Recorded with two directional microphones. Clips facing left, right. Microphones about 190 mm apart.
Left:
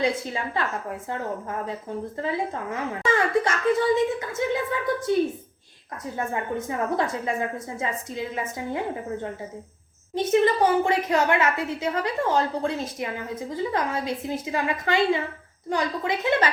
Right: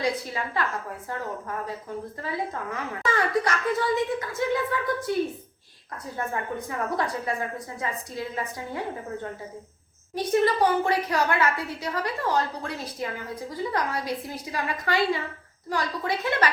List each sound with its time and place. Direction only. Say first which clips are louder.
0.1 s a woman's voice: left 1 dB; 25° left (ahead or behind)
2.2 s a woman's voice: left 3 dB; 25° left (ahead or behind)
6.1 s a woman's voice: left 2 dB; 20° left (ahead or behind)
10.2 s a woman's voice: left 2 dB; 25° left (ahead or behind)